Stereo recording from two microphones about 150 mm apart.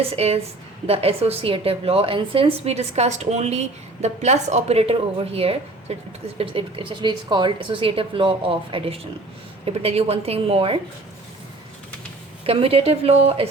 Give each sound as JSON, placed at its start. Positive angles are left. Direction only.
{"t": 0.0, "sound": "a woman's voice", "side_deg": -40}
{"t": 12.5, "sound": "a woman's voice", "side_deg": -40}